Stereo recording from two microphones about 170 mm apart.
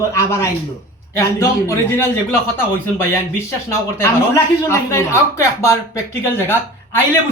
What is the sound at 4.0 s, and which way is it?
Speech, 15° left (ahead or behind).